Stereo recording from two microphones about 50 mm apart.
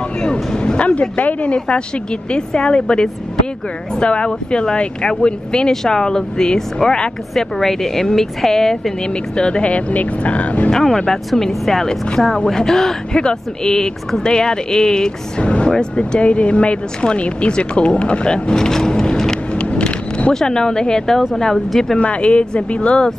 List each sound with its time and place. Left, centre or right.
0.2 s a sound: centre
1.1 s speech: left; by 8.9 s centre
9.4 s speech: left
10.7 s speech: centre
19.6 s vehicle: centre
20.3 s speech: centre
21.9 s speech: left